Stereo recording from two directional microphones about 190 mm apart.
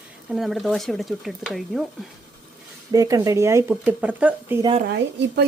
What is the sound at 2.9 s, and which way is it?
Speech, 15° right (ahead or behind).